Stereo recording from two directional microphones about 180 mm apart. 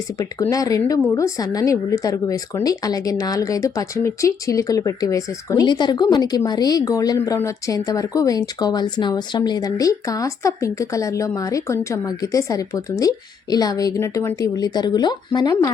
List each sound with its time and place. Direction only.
0.5 s speech: 20° left (ahead or behind)